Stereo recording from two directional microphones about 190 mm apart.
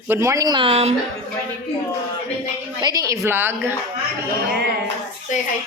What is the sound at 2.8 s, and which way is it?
Speech, 20° right (ahead or behind).